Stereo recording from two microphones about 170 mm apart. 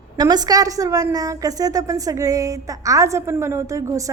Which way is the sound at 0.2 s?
25° right (ahead or behind).